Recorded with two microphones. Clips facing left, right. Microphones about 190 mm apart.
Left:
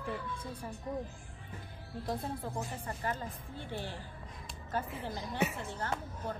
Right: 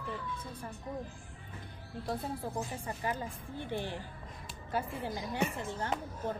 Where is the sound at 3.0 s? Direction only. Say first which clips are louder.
Right 1 dB; 10° right (ahead or behind).